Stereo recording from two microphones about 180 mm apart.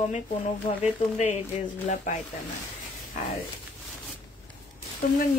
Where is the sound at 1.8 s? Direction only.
40° left (ahead or behind).